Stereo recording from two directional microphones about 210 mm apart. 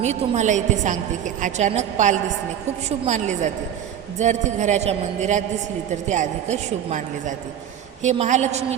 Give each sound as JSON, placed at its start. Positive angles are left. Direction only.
{"t": 0.0, "sound": "a woman's voice", "side_deg": -35}